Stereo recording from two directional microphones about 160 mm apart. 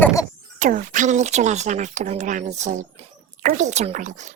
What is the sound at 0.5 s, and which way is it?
A child's voice, 50° right (ahead or behind).